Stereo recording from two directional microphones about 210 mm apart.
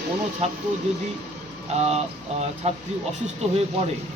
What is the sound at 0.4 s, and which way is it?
Speech, 30° right (ahead or behind).